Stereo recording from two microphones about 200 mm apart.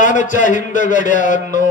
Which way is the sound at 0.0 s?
40° left (ahead or behind).